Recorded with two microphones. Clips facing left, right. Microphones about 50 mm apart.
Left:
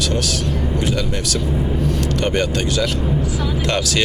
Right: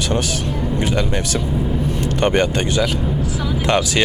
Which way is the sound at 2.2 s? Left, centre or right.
Right.